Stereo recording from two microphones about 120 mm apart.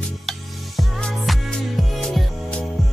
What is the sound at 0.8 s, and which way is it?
Music, 5° left (ahead or behind).